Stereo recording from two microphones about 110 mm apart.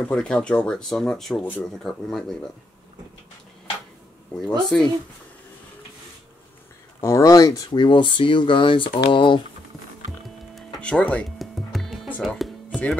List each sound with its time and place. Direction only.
0.1 s speech: 10° left (ahead or behind)
4.4 s speech: 5° left (ahead or behind)
7.0 s speech: 25° left (ahead or behind)
7.7 s speech: 45° left (ahead or behind)
10.2 s a sound: centre (ahead or behind)
11.3 s music: centre (ahead or behind)
12.2 s speech: centre (ahead or behind)
12.6 s music: 10° left (ahead or behind)